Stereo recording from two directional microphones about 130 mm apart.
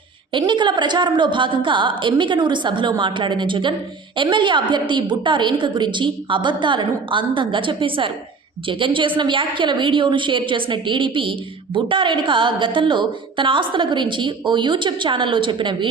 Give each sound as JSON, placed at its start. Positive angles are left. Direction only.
{"t": 0.3, "sound": "a woman's voice", "side_deg": -35}